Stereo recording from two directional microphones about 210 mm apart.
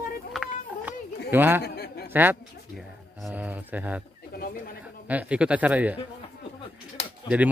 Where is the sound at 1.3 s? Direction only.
10° right (ahead or behind).